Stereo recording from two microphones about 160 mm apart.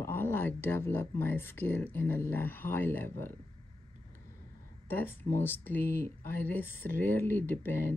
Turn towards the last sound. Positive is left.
turn(degrees=15)  # may be behind; listen again after turning